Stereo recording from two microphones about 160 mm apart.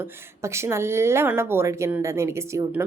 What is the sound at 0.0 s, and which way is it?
A woman's voice, 15° right (ahead or behind).